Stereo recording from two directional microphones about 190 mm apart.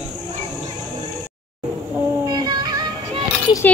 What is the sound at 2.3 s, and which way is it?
Music, 20° right (ahead or behind).